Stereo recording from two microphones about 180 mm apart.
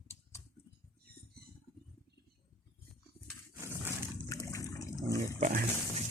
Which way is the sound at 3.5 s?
15° right (ahead or behind).